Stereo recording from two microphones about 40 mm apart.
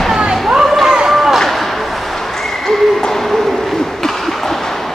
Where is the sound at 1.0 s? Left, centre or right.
Centre.